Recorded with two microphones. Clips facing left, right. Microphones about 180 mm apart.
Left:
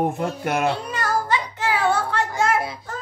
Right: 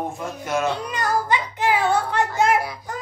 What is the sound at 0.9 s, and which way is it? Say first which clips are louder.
Child singing: right 1 dB; 15° right (ahead or behind).